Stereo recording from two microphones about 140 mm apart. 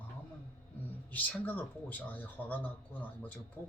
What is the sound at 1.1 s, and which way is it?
Speech, 10° left (ahead or behind).